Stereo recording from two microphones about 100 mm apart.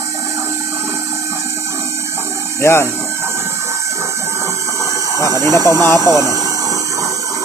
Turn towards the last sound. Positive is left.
turn(degrees=-35)  # may be behind; listen again after turning